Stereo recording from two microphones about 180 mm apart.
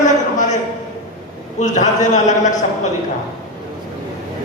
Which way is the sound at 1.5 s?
40° left (ahead or behind).